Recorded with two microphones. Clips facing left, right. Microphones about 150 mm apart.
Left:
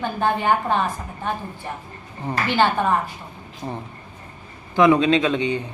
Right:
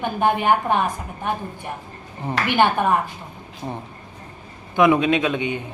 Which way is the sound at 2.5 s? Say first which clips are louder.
Right 1 dB; 15° right (ahead or behind).